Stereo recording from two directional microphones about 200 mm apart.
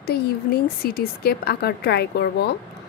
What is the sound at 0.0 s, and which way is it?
Speech, 50° left (ahead or behind).